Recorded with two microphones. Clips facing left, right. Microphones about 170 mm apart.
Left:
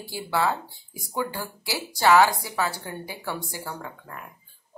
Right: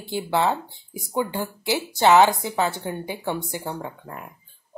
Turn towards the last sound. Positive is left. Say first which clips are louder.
# right 4 dB
turn(degrees=-25)  # may be behind; listen again after turning